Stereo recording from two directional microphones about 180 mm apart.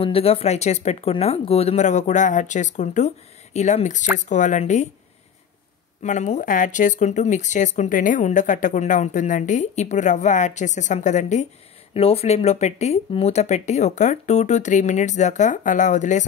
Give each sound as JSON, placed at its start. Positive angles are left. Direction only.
{"t": 0.0, "sound": "speech", "side_deg": 35}
{"t": 6.0, "sound": "speech", "side_deg": 45}